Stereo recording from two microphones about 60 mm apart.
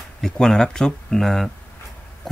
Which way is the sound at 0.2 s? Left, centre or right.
Centre.